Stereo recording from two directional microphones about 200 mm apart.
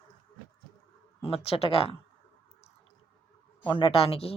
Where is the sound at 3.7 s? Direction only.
25° left (ahead or behind).